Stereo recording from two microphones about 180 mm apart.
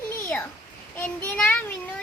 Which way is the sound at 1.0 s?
10° left (ahead or behind).